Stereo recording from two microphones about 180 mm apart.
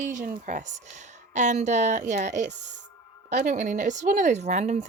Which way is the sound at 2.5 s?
75° right (ahead or behind).